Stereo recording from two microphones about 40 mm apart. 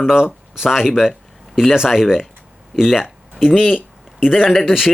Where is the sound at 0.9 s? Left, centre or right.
Centre.